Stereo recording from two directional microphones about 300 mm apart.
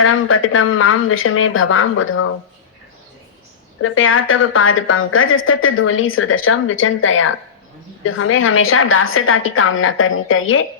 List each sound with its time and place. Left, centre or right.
0.0 s speech: left
3.8 s a woman's voice: left